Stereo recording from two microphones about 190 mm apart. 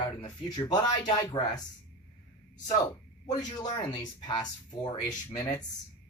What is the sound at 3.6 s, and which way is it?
A woman's voice, 25° left (ahead or behind).